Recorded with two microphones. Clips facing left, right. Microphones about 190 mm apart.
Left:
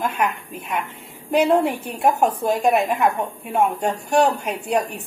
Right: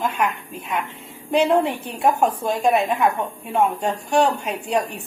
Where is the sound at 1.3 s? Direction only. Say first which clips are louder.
Left 1 dB; centre (ahead or behind).